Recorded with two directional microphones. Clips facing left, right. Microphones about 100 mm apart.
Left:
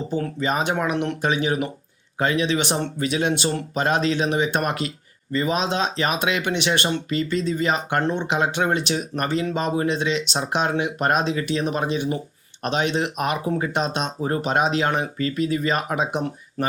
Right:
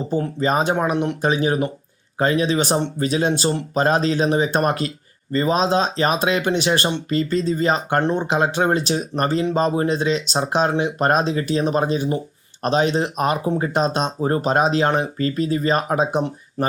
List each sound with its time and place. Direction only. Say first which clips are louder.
0.3 s speech: right 4 dB; 35° right (ahead or behind)